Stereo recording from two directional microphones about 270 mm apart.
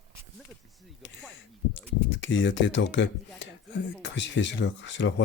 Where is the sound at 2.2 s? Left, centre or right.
Left.